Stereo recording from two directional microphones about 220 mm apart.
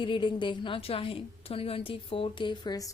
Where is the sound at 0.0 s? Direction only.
20° left (ahead or behind).